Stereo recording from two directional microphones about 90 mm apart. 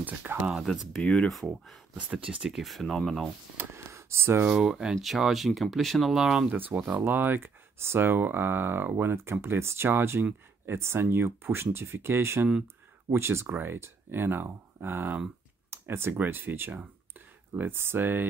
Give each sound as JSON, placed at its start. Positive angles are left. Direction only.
{"t": 0.0, "sound": "speech", "side_deg": -20}
{"t": 0.6, "sound": "speech", "side_deg": 0}
{"t": 1.0, "sound": "speech", "side_deg": 10}
{"t": 2.0, "sound": "speech", "side_deg": -15}
{"t": 3.5, "sound": "gasp", "side_deg": -30}
{"t": 4.5, "sound": "speech", "side_deg": -5}
{"t": 6.7, "sound": "speech", "side_deg": -20}